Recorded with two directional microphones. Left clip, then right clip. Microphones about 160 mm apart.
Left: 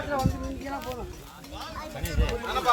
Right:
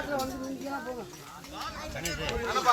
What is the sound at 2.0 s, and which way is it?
Speech, 90° left.